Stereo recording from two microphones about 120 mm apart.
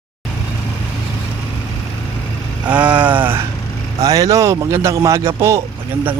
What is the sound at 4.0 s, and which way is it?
Speech, 30° right (ahead or behind).